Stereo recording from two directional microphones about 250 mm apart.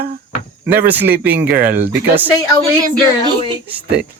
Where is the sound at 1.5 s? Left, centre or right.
Right.